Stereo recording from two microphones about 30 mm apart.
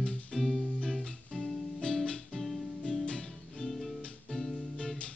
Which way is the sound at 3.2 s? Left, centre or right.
Centre.